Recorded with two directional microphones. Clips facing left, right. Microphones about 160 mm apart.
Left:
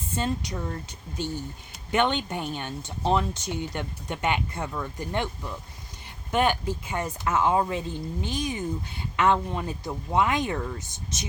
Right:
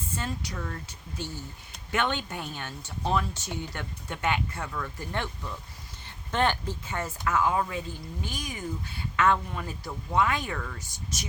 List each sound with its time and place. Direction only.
0.2 s speech: 20° left (ahead or behind)